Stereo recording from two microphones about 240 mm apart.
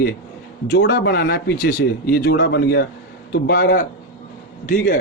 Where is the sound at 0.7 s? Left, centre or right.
Left.